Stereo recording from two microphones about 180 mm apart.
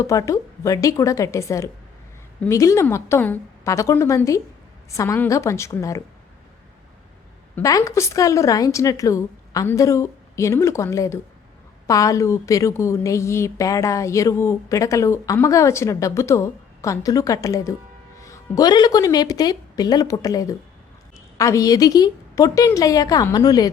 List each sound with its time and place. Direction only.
0.0 s a woman's voice: 15° left (ahead or behind)
7.5 s a woman's voice: 20° left (ahead or behind)